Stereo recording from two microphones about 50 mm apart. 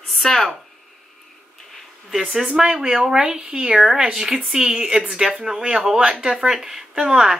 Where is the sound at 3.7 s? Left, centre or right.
Centre.